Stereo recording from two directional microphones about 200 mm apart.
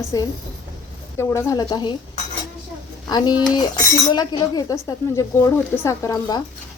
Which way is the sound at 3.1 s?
20° left (ahead or behind).